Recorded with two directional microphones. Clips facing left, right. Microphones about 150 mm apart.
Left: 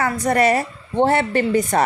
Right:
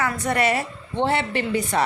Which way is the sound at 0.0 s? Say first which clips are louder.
Left 5 dB; 40° left (ahead or behind).